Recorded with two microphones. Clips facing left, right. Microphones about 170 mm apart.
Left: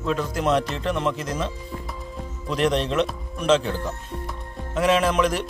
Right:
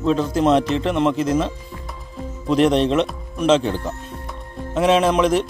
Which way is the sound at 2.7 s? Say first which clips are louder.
Right 5 dB; centre (ahead or behind).